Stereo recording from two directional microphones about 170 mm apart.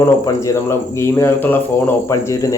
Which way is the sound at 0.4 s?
15° left (ahead or behind).